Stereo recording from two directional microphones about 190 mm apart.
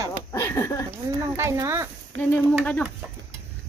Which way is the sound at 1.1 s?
15° right (ahead or behind).